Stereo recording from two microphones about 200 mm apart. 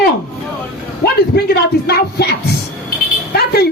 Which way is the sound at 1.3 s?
55° left (ahead or behind).